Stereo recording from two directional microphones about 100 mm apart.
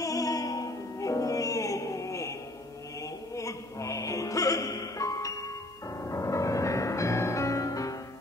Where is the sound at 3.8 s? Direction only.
30° left (ahead or behind).